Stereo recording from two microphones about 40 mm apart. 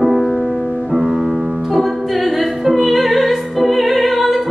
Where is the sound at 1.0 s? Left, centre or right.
Centre.